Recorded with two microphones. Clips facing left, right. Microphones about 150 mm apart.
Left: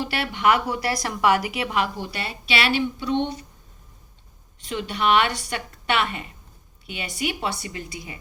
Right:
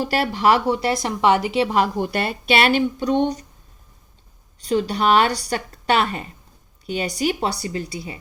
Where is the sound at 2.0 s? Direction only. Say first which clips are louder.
Right 8 dB; 50° right (ahead or behind).